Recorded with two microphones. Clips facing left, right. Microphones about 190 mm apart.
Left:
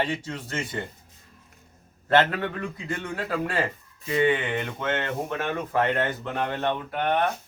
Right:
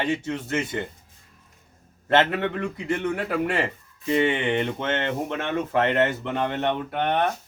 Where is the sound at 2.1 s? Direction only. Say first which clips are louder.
Right 1 dB; 20° right (ahead or behind).